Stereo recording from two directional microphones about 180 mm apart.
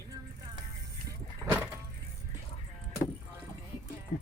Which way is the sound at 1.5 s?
10° right (ahead or behind).